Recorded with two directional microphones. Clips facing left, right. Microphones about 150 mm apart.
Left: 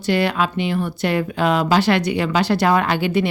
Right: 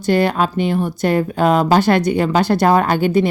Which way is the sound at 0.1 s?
45° right (ahead or behind).